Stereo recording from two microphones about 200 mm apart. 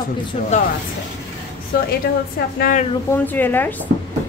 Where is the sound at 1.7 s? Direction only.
50° left (ahead or behind).